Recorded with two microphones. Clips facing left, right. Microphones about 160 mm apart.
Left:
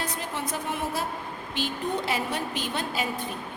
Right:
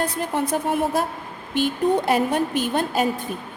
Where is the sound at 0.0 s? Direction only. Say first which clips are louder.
Right 8 dB; 50° right (ahead or behind).